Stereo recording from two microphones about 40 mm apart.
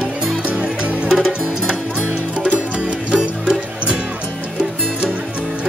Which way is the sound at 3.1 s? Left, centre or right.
Right.